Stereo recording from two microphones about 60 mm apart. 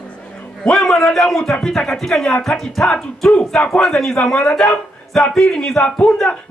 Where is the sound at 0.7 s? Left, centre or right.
Centre.